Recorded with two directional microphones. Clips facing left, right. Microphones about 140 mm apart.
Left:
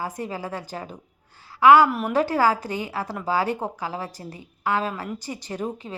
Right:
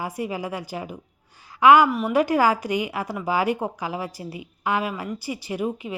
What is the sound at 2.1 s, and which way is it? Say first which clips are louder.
A woman's voice: right 2 dB; 15° right (ahead or behind).